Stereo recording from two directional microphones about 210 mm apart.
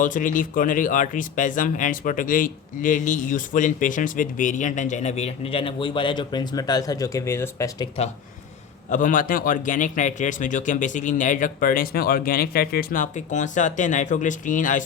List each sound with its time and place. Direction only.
0.0 s speech: 40° left (ahead or behind); by 7.9 s 15° left (ahead or behind)
8.9 s speech: 40° left (ahead or behind)